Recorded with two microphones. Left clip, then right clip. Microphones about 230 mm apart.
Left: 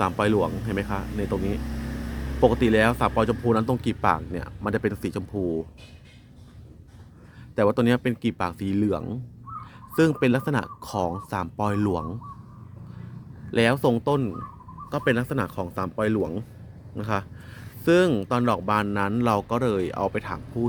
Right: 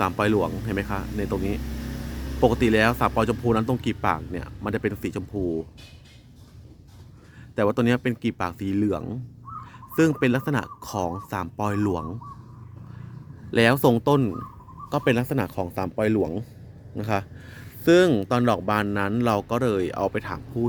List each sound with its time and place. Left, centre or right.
0.0 s speech: centre
7.5 s speech: centre
13.5 s speech: centre